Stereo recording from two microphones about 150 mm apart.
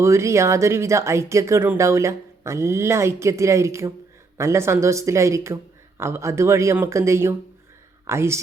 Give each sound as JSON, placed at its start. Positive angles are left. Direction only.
{"t": 0.0, "sound": "speech", "side_deg": -20}